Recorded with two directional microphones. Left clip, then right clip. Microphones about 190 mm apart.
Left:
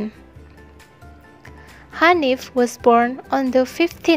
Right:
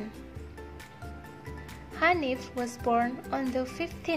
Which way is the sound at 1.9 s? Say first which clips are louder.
Left 11 dB; 45° left (ahead or behind).